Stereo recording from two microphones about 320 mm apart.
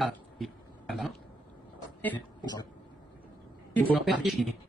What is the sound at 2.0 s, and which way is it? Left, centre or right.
Speech, centre.